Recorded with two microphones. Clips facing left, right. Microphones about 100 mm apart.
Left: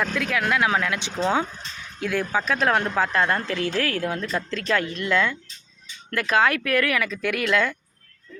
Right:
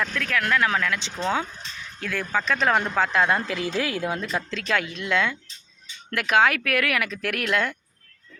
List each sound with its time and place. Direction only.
0.0 s speech: 10° left (ahead or behind); by 7.8 s 5° right (ahead or behind)